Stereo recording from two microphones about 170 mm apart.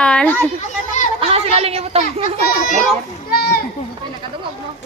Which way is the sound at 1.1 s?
35° right (ahead or behind).